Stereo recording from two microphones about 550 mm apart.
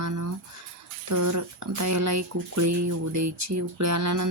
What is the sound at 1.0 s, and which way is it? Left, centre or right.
Speech, right.